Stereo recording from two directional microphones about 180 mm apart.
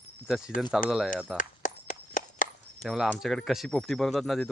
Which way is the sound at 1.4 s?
45° left (ahead or behind).